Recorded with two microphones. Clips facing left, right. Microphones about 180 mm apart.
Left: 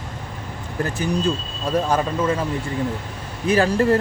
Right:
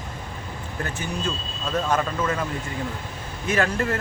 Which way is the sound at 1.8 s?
30° left (ahead or behind).